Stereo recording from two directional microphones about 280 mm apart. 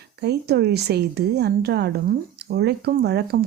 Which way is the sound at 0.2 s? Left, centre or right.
Right.